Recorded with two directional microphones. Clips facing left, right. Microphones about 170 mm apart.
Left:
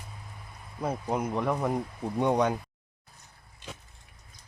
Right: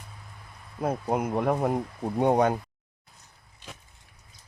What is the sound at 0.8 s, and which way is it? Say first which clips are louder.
Speech: right 3 dB; 55° right (ahead or behind).